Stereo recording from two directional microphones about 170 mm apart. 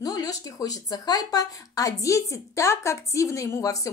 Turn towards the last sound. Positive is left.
turn(degrees=20)  # may be behind; listen again after turning